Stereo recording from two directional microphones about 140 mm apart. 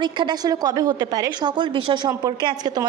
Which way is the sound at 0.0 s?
30° right (ahead or behind).